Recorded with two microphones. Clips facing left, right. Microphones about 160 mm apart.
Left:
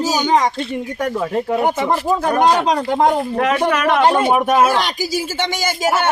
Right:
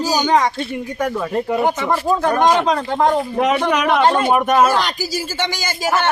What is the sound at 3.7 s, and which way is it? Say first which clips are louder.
Speech: left 1 dB; centre (ahead or behind).